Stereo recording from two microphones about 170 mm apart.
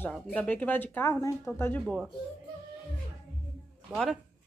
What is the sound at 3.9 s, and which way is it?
Speech, centre (ahead or behind).